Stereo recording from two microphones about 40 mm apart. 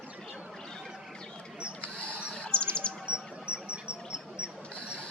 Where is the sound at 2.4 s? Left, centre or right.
Left.